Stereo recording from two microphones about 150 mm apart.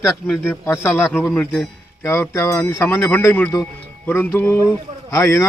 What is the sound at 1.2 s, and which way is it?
Speech, 5° left (ahead or behind).